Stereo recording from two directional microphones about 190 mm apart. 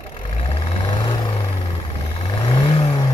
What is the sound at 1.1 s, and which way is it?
Vehicle, 25° left (ahead or behind).